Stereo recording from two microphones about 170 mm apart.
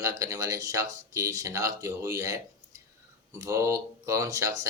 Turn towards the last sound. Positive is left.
turn(degrees=-20)  # may be behind; listen again after turning